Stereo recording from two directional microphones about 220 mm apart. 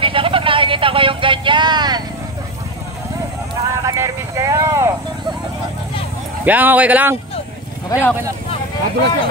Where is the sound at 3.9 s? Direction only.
15° right (ahead or behind).